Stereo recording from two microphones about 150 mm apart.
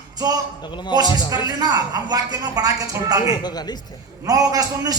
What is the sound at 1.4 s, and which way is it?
A man's voice, 25° right (ahead or behind).